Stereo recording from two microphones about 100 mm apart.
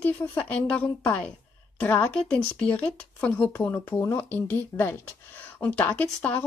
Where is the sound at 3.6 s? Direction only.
25° left (ahead or behind).